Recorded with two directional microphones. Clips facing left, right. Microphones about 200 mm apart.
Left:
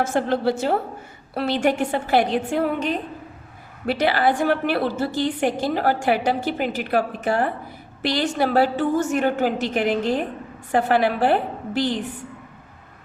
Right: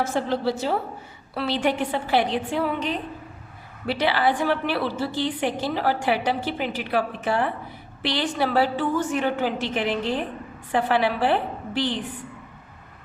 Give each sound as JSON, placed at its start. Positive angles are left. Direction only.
{"t": 0.0, "sound": "a woman's voice", "side_deg": 50}